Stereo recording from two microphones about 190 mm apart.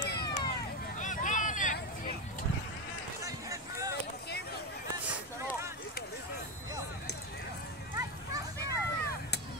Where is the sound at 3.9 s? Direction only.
60° left (ahead or behind).